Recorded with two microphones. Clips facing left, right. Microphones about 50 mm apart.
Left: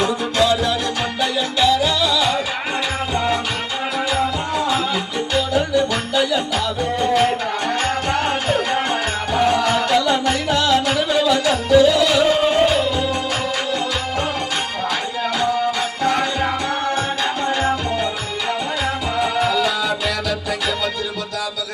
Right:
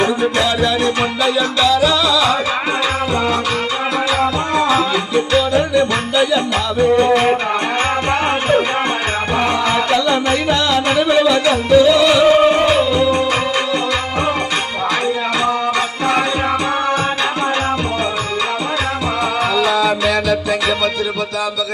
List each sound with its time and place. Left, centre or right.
0.0 s music: right
1.2 s music: right
4.2 s music: right
19.2 s music: right